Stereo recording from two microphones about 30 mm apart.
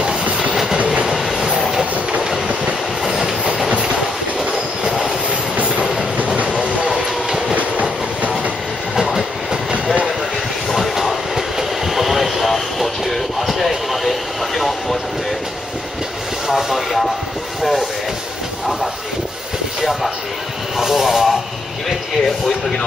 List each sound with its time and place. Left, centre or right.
0.2 s train: right
1.0 s train: centre
3.1 s train: centre
3.6 s train: right
4.8 s train: centre
6.2 s train: right
6.5 s train: right
6.9 s train: centre
8.9 s train: centre
10.7 s train: centre
13.5 s a sound: centre
16.4 s vehicle: centre
19.8 s a sound: centre
21.8 s a sound: centre